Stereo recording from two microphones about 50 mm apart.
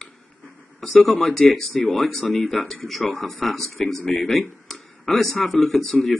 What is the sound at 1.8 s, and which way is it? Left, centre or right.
Speech, centre.